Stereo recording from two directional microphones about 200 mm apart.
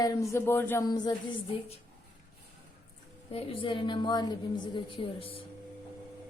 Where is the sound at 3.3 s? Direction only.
25° left (ahead or behind).